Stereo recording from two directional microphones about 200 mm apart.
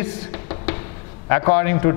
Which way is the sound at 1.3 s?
15° left (ahead or behind).